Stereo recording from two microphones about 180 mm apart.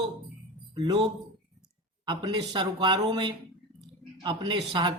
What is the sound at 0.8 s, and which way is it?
A man's voice, 25° right (ahead or behind).